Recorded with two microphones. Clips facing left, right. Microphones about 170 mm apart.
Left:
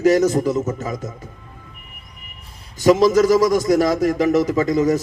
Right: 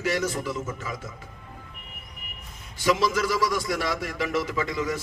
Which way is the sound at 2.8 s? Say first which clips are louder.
Left 10 dB; 45° left (ahead or behind).